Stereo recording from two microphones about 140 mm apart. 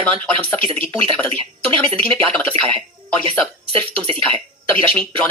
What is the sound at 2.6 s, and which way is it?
Speech, 40° right (ahead or behind).